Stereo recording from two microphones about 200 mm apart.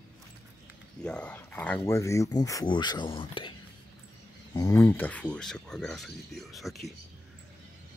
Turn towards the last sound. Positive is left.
turn(degrees=0)  # may be behind; listen again after turning